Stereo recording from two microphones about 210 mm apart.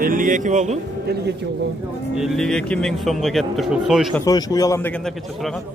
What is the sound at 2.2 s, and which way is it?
Speech, centre (ahead or behind).